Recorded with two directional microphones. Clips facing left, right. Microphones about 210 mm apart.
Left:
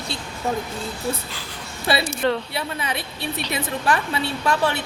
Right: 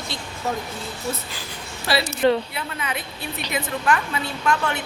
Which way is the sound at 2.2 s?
10° right (ahead or behind).